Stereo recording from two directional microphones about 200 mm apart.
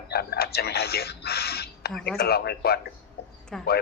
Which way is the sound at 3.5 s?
Centre (ahead or behind).